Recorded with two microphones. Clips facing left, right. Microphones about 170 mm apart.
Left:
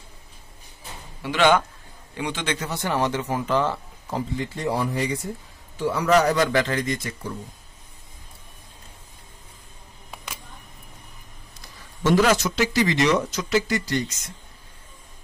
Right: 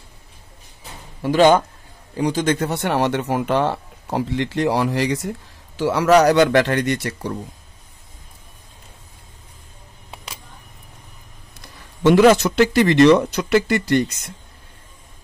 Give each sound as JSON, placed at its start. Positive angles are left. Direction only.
{"t": 1.2, "sound": "speech", "side_deg": -40}
{"t": 10.1, "sound": "a sound", "side_deg": -30}
{"t": 12.0, "sound": "speech", "side_deg": -65}